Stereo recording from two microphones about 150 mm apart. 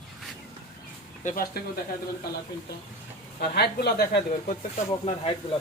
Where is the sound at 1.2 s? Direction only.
55° left (ahead or behind).